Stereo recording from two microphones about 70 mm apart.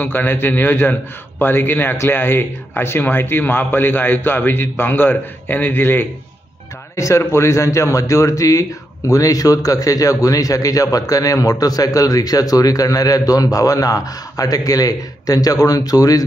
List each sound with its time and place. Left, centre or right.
0.0 s a man's voice: left
7.0 s a man's voice: left